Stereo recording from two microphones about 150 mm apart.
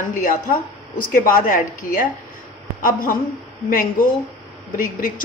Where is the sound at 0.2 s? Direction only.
60° left (ahead or behind).